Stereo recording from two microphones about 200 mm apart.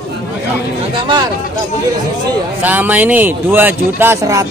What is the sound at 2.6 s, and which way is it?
Speech, 10° right (ahead or behind).